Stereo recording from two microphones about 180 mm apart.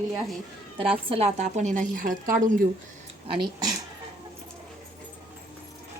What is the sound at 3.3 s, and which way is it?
Speech, 25° right (ahead or behind).